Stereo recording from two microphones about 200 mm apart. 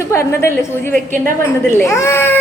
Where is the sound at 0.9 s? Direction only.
45° right (ahead or behind).